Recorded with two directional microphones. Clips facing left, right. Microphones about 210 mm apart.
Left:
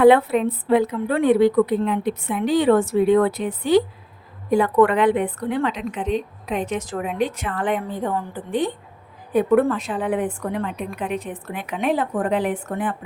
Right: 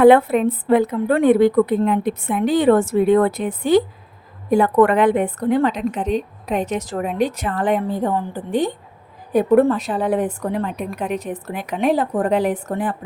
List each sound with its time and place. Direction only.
0.0 s a woman's voice: 50° right (ahead or behind)